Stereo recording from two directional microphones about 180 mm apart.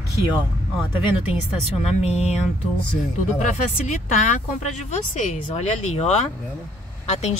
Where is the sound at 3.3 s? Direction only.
40° left (ahead or behind).